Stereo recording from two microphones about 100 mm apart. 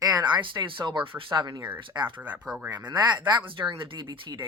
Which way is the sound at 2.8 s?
45° right (ahead or behind).